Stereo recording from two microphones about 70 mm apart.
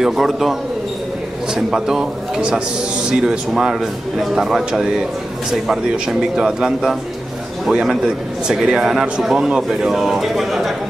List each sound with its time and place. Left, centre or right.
0.0 s a man's voice: centre